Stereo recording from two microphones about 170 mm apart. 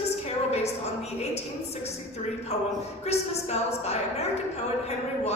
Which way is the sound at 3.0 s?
40° left (ahead or behind).